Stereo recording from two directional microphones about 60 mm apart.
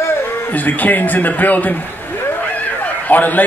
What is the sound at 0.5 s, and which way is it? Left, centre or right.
Speech, left.